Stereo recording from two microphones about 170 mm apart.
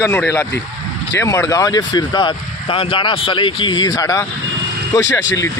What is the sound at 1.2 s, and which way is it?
Speech, 15° left (ahead or behind).